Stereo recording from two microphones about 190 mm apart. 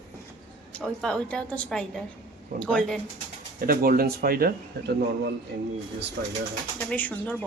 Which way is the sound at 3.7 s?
50° right (ahead or behind).